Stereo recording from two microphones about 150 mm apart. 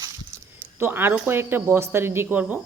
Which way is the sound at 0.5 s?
15° right (ahead or behind).